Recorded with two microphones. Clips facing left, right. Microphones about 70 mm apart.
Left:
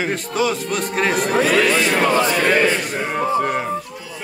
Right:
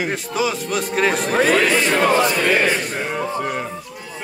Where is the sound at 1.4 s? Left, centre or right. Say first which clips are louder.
Right 1 dB; right.